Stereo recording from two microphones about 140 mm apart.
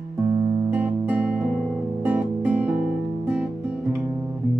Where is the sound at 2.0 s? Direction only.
10° right (ahead or behind).